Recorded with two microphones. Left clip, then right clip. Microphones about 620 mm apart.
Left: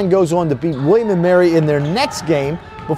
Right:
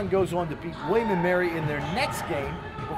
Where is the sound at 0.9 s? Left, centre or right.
Left.